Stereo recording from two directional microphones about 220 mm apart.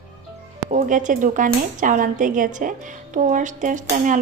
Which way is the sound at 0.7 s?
35° right (ahead or behind).